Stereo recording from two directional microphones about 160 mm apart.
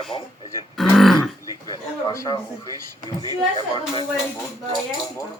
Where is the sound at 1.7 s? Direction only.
20° left (ahead or behind).